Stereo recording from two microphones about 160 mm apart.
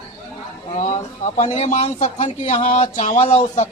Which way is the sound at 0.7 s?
45° left (ahead or behind).